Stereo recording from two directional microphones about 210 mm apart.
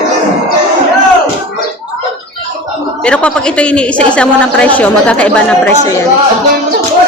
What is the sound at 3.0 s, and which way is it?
A woman's voice, 5° left (ahead or behind).